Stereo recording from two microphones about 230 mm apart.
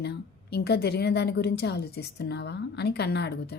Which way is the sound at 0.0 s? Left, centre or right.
Left.